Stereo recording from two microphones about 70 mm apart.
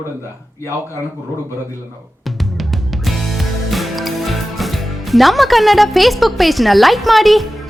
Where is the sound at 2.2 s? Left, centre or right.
Centre.